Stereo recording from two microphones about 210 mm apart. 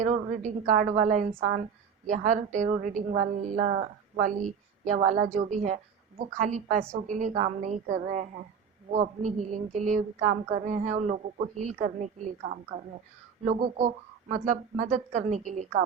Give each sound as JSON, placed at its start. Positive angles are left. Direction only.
{"t": 0.0, "sound": "a woman's voice", "side_deg": -35}